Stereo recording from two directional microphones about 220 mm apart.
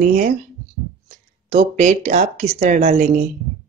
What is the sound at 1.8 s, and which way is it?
Speech, 30° right (ahead or behind).